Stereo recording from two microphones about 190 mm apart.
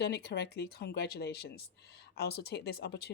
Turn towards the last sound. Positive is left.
turn(degrees=60)  # may be behind; listen again after turning